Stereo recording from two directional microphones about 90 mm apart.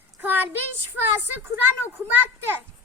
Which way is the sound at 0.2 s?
20° right (ahead or behind).